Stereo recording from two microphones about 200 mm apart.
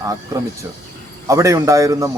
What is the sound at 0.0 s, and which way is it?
Speech, 15° right (ahead or behind).